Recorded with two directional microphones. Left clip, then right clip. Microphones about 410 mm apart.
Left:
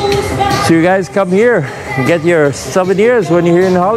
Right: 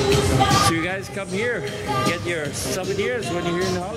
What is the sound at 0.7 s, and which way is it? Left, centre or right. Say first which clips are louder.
Speech: left 15 dB; left.